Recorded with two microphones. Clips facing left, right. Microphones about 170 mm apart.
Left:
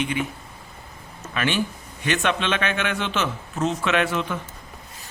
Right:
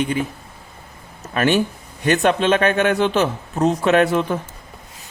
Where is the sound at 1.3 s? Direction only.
45° right (ahead or behind).